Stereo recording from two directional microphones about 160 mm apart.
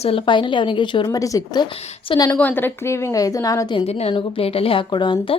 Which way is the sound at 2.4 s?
10° left (ahead or behind).